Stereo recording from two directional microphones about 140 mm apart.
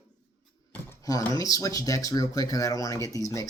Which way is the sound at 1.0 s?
25° left (ahead or behind).